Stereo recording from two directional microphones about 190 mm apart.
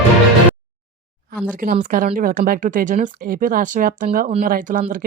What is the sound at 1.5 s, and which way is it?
Speech, 45° right (ahead or behind).